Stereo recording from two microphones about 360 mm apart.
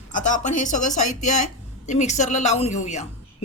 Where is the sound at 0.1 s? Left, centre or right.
Left.